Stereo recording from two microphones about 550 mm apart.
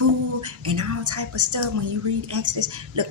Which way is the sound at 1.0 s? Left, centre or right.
Right.